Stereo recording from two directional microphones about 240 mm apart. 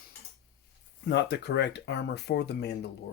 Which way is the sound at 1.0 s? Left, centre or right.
Left.